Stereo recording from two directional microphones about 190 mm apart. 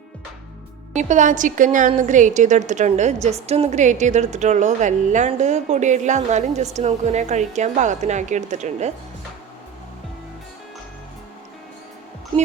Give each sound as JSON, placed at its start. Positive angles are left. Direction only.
{"t": 0.9, "sound": "a woman's voice", "side_deg": -40}